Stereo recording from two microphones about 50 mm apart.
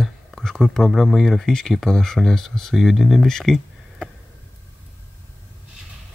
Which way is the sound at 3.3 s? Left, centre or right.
Centre.